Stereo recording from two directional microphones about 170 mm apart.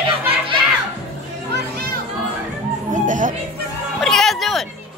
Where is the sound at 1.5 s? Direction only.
60° right (ahead or behind).